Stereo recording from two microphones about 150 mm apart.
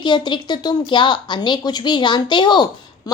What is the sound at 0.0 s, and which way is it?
A woman's voice, 30° left (ahead or behind).